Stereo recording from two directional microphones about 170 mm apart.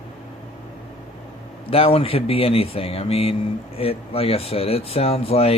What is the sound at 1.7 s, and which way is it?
Speech, 35° left (ahead or behind).